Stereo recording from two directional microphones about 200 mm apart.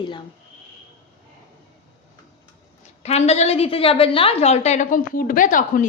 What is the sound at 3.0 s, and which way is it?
A woman's voice, 30° left (ahead or behind).